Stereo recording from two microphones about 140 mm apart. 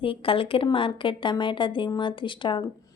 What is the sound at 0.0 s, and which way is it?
Speech, 40° left (ahead or behind).